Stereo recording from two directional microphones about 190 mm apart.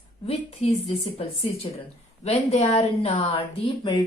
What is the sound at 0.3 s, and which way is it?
A woman's voice, 30° left (ahead or behind).